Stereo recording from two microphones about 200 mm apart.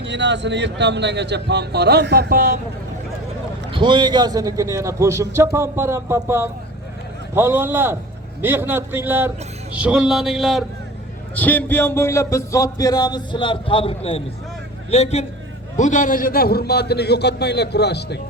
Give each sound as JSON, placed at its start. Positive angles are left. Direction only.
{"t": 0.0, "sound": "speech", "side_deg": -60}
{"t": 3.7, "sound": "a man's voice", "side_deg": -25}